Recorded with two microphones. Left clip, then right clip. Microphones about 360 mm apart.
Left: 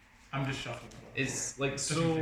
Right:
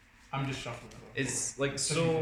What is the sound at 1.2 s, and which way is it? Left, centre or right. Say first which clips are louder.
Speech: right 1 dB; right.